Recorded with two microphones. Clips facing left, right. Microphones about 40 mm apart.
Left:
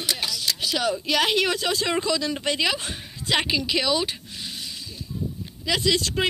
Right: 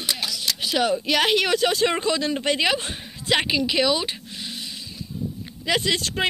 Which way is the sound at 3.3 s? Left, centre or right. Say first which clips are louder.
Right 2 dB; centre.